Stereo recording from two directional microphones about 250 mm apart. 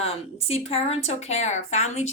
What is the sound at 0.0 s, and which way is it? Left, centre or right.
Speech, left.